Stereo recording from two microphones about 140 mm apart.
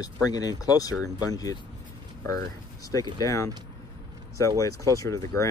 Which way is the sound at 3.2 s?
20° left (ahead or behind).